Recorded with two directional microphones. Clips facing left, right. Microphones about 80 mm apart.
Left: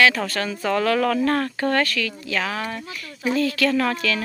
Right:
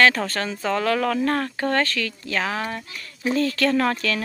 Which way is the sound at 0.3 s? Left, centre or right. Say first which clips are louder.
Left 1 dB; right.